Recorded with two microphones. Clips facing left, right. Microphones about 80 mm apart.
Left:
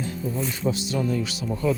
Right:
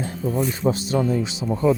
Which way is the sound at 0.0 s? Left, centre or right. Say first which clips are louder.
Right 5 dB; right.